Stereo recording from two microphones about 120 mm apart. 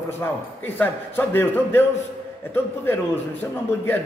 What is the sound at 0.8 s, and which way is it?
A man's voice, 20° left (ahead or behind).